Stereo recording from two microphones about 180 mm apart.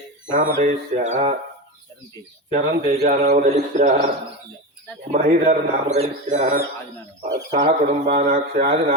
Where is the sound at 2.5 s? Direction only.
55° right (ahead or behind).